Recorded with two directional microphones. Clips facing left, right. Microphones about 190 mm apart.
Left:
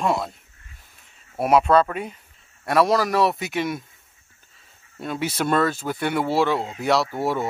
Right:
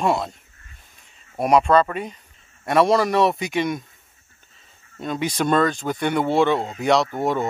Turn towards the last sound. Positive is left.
turn(degrees=5)  # may be behind; listen again after turning